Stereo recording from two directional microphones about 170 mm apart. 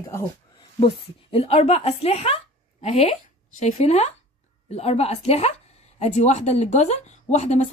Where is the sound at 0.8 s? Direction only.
35° left (ahead or behind).